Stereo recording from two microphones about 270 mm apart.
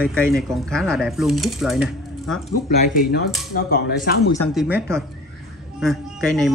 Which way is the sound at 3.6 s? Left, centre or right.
Left.